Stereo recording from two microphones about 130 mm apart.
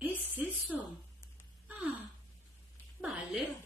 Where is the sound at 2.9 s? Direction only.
10° right (ahead or behind).